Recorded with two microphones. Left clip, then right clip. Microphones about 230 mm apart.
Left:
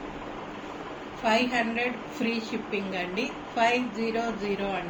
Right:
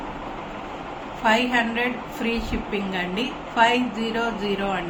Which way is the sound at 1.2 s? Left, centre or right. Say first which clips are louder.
Right 5 dB; right.